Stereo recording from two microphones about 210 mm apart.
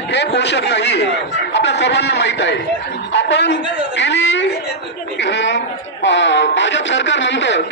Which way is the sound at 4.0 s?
55° left (ahead or behind).